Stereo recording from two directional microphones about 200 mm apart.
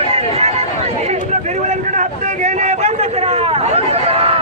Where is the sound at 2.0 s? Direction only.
35° right (ahead or behind).